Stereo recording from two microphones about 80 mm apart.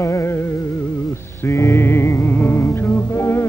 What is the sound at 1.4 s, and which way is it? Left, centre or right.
Music, left.